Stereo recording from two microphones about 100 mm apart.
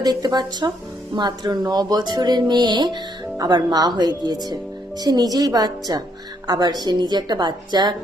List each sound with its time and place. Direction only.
0.0 s a woman's voice: 40° right (ahead or behind)